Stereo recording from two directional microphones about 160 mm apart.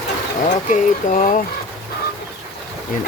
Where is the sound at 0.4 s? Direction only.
50° left (ahead or behind).